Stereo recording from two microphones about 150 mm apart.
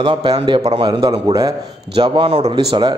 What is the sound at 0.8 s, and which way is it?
Speech, 30° right (ahead or behind).